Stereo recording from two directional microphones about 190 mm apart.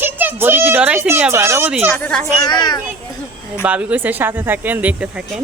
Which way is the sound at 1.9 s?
5° left (ahead or behind).